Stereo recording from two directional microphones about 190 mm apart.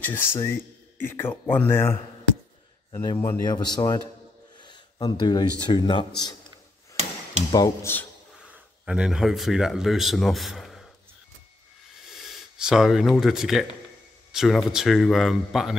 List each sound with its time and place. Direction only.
0.0 s speech: 10° left (ahead or behind)
3.0 s speech: 15° left (ahead or behind)
4.6 s a sound: 25° left (ahead or behind)
5.7 s speech: 25° left (ahead or behind)
7.5 s speech: 15° left (ahead or behind)
8.8 s a man's voice: 5° right (ahead or behind)
12.1 s a man's voice: centre (ahead or behind)